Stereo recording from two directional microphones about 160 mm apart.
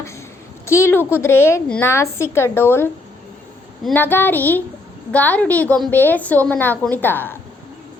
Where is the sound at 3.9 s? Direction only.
10° left (ahead or behind).